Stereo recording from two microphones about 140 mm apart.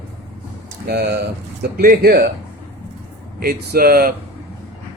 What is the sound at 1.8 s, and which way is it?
Speech, 90° right.